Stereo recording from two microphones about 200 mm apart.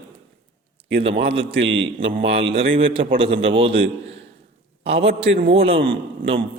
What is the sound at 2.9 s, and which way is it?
Speech, 25° right (ahead or behind).